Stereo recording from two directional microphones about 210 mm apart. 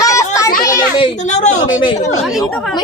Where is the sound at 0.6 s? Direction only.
15° left (ahead or behind).